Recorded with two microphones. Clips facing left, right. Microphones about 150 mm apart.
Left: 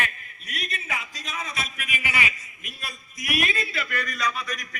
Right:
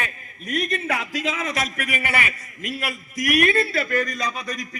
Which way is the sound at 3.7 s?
40° right (ahead or behind).